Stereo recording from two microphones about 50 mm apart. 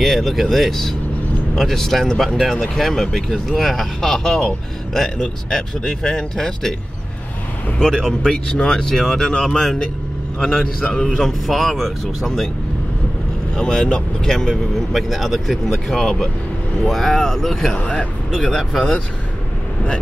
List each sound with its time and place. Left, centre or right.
0.0 s speech: centre
2.5 s speech: centre
7.8 s speech: centre
10.4 s speech: centre
10.9 s speech: centre
13.6 s speech: centre
17.7 s speech: left
18.3 s speech: centre